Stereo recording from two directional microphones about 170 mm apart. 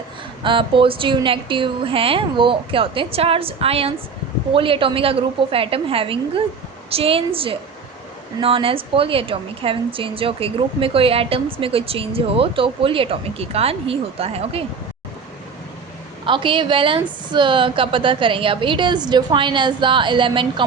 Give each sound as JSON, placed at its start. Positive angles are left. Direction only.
{"t": 0.4, "sound": "a woman's voice", "side_deg": -30}
{"t": 16.2, "sound": "a woman's voice", "side_deg": -30}